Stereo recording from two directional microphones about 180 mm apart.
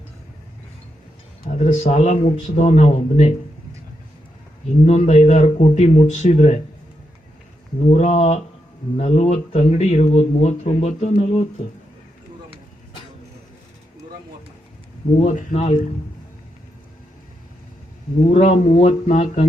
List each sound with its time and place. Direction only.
1.5 s speech: 40° left (ahead or behind)
4.9 s speech: 40° left (ahead or behind)
7.9 s speech: 35° left (ahead or behind)
15.2 s speech: 45° left (ahead or behind)
18.3 s speech: 40° left (ahead or behind)